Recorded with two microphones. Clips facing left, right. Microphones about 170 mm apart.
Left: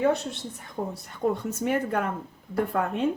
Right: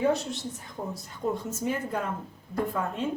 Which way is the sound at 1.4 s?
65° left (ahead or behind).